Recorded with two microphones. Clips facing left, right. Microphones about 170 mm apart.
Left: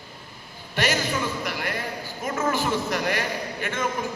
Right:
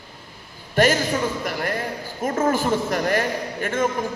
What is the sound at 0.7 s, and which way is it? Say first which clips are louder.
A man's voice: right 6 dB; 45° right (ahead or behind).